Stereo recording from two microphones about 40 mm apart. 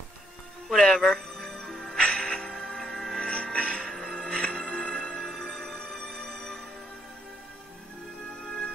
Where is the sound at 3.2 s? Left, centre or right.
Left.